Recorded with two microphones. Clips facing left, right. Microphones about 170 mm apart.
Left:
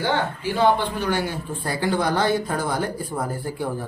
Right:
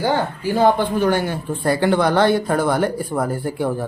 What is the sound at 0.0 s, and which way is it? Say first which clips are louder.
A man's voice: right 4 dB; 40° right (ahead or behind).